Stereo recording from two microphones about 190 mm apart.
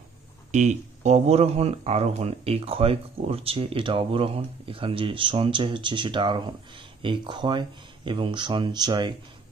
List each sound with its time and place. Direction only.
0.5 s speech: 35° right (ahead or behind)